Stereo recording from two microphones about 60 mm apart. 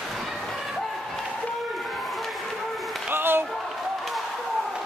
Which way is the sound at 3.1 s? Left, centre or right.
Right.